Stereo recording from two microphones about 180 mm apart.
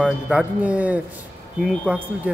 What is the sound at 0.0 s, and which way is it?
Speech, 5° right (ahead or behind).